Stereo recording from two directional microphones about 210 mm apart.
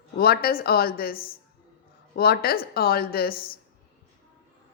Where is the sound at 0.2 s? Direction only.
45° left (ahead or behind).